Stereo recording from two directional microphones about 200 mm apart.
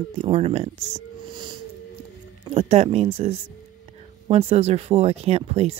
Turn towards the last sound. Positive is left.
turn(degrees=-30)  # may be behind; listen again after turning